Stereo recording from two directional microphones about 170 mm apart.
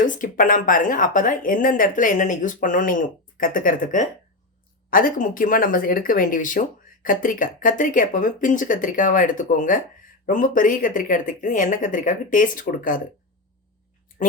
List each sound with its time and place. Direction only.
0.0 s speech: 50° left (ahead or behind)